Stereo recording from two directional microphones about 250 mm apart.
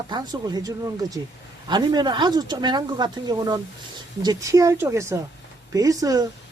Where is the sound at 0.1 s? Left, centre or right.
Centre.